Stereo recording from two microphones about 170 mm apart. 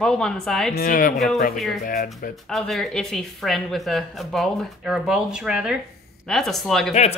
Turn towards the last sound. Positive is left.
turn(degrees=40)  # may be behind; listen again after turning